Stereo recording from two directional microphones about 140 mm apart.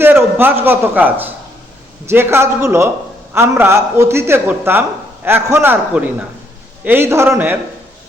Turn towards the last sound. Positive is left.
turn(degrees=-15)  # may be behind; listen again after turning